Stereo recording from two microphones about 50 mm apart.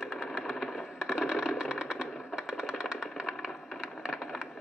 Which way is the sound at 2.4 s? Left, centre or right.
Centre.